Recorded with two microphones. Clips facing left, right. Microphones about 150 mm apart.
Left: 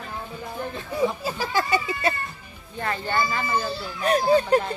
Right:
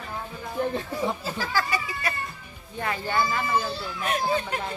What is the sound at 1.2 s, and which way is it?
Speech, 15° left (ahead or behind).